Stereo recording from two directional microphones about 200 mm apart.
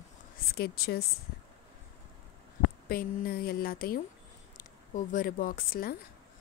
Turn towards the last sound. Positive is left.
turn(degrees=45)  # may be behind; listen again after turning